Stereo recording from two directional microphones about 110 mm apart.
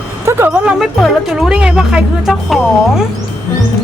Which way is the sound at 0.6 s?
Centre (ahead or behind).